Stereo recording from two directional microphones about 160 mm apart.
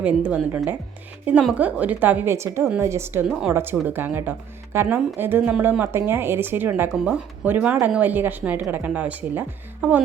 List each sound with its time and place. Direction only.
0.0 s a woman's voice: 10° right (ahead or behind)